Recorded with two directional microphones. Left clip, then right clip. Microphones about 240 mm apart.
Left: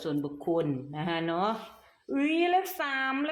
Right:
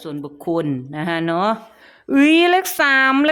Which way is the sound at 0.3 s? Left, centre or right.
Right.